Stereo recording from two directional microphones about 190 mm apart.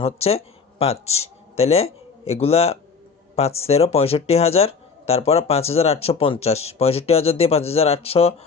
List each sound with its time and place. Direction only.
0.0 s speech: 30° left (ahead or behind)